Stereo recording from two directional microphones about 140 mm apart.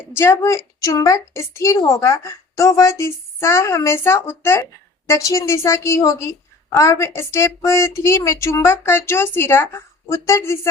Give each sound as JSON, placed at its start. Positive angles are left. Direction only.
{"t": 0.1, "sound": "a woman's voice", "side_deg": 20}